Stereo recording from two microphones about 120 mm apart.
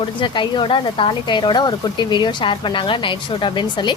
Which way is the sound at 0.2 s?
45° left (ahead or behind).